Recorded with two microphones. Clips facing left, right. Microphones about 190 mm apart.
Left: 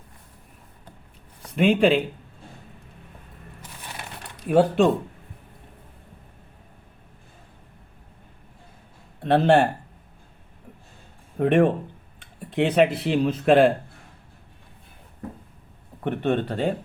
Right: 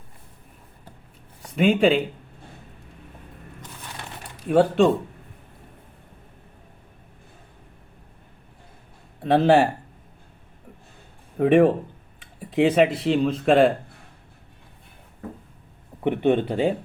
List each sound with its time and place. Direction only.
1.5 s speech: centre (ahead or behind)
4.4 s speech: centre (ahead or behind)
9.2 s speech: centre (ahead or behind)
11.3 s speech: centre (ahead or behind)
16.0 s speech: 15° right (ahead or behind)